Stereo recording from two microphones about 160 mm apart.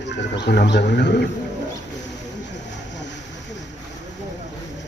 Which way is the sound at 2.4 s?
90° left.